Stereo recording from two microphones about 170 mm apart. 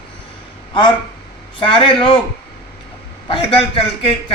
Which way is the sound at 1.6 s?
30° left (ahead or behind).